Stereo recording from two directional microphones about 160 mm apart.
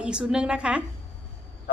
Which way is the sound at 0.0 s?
5° right (ahead or behind).